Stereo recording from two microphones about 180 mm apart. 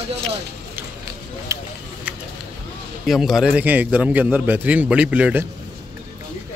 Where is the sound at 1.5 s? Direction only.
15° right (ahead or behind).